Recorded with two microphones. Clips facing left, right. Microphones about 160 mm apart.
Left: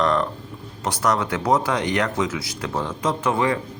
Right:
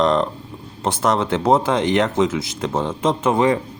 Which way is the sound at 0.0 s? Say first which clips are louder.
Right 3 dB; 20° right (ahead or behind).